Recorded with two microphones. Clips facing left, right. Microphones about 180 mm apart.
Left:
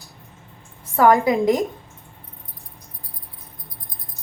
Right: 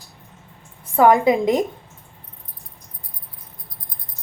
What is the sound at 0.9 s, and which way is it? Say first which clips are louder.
Speech: right 1 dB; 20° right (ahead or behind).